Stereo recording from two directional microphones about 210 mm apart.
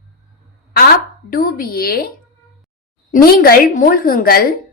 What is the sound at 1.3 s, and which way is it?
A woman's voice, 45° left (ahead or behind).